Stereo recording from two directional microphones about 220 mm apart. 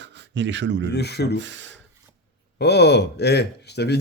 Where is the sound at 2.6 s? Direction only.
50° left (ahead or behind).